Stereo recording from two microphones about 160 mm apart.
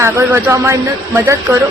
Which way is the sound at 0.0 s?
15° right (ahead or behind).